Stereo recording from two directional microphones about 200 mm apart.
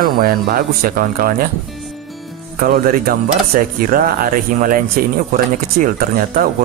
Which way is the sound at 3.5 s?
40° right (ahead or behind).